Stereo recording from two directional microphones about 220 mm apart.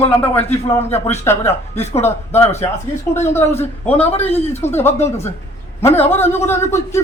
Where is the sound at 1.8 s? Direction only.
30° left (ahead or behind).